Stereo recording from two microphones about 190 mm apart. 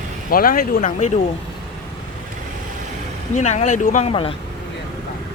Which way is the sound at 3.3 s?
40° left (ahead or behind).